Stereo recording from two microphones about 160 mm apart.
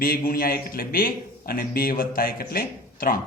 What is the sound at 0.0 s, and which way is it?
A man's voice, 65° left (ahead or behind).